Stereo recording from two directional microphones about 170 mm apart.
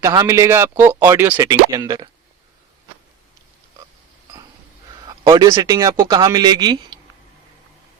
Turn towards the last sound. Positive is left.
turn(degrees=-25)  # may be behind; listen again after turning